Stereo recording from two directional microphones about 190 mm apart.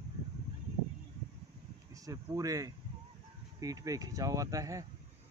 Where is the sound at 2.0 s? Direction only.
20° right (ahead or behind).